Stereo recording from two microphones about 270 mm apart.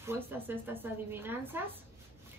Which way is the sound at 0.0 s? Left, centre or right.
Centre.